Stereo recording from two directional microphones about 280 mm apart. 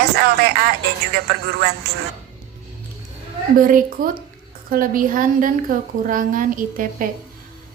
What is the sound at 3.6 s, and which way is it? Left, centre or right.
A woman's voice, right.